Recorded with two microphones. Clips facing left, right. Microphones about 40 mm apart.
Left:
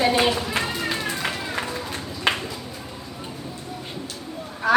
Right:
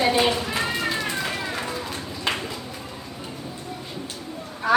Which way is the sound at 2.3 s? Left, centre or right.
Left.